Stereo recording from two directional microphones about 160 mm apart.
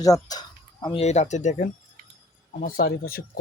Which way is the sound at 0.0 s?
25° left (ahead or behind).